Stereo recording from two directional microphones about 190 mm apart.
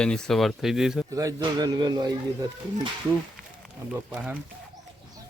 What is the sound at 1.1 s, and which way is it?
A man's voice, 15° right (ahead or behind).